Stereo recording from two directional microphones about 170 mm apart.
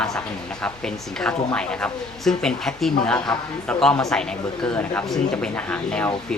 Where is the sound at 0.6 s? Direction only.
5° left (ahead or behind).